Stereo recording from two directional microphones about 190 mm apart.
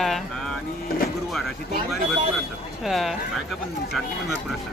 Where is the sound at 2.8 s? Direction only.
Centre (ahead or behind).